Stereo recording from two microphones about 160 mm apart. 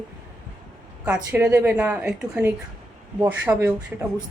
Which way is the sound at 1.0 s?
10° right (ahead or behind).